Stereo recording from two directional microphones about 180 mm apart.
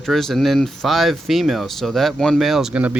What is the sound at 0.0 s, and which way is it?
Speech, centre (ahead or behind).